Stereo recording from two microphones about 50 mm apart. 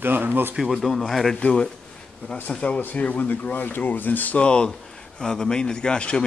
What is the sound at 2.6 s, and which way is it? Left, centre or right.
Speech, left.